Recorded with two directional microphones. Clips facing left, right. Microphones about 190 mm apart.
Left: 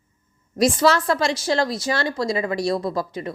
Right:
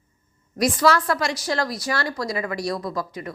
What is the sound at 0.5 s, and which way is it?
A woman's voice, 25° left (ahead or behind).